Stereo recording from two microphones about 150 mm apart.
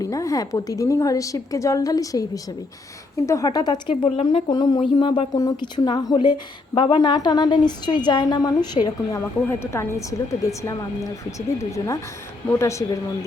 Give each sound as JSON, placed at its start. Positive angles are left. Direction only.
{"t": 0.0, "sound": "speech", "side_deg": 20}
{"t": 9.5, "sound": "speech", "side_deg": 15}
{"t": 12.5, "sound": "speech", "side_deg": 20}